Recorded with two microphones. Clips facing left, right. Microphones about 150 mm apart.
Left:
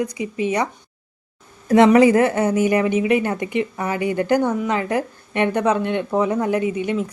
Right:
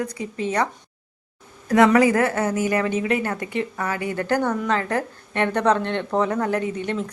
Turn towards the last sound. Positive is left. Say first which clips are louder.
# left 4 dB
turn(degrees=10)  # may be behind; listen again after turning